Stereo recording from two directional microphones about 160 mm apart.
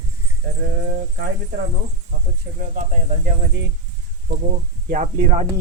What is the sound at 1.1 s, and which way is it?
Speech, 90° right.